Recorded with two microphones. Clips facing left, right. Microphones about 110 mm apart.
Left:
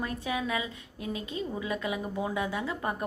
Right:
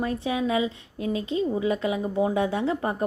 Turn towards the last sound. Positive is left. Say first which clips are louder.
# right 7 dB
turn(degrees=-25)  # may be behind; listen again after turning